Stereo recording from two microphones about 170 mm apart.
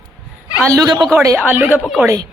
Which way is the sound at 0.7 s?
20° right (ahead or behind).